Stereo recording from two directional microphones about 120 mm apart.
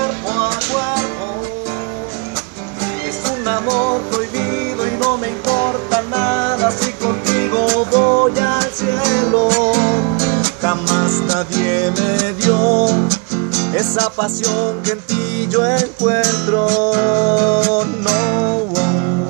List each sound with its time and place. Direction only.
5.9 s music: 15° left (ahead or behind)
7.9 s music: 25° left (ahead or behind)